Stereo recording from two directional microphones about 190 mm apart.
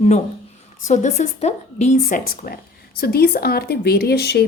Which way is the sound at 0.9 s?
40° left (ahead or behind).